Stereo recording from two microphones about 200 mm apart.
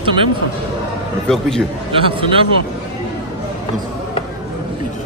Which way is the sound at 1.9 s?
25° right (ahead or behind).